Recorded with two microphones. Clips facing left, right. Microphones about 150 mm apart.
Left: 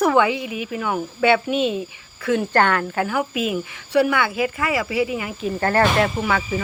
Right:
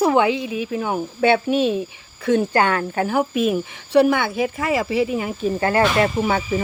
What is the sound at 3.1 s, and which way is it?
Speech, 35° right (ahead or behind).